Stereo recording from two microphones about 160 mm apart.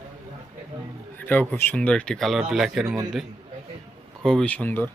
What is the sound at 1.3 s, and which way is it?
Speech, 10° left (ahead or behind).